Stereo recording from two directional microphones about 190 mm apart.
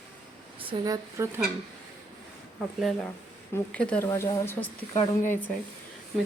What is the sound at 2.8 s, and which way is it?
Speech, centre (ahead or behind).